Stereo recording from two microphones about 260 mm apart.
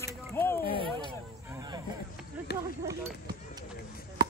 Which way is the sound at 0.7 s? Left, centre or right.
Centre.